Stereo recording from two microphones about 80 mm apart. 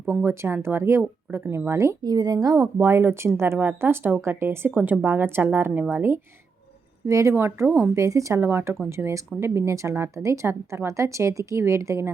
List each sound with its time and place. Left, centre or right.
0.1 s a woman's voice: right
2.0 s speech: right
2.7 s a woman's voice: right
4.7 s speech: centre
5.0 s a woman's voice: right
7.0 s a woman's voice: right
8.4 s a woman's voice: right